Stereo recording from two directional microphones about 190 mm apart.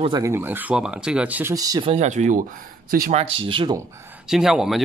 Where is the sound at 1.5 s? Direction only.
20° right (ahead or behind); by 3.1 s 45° right (ahead or behind).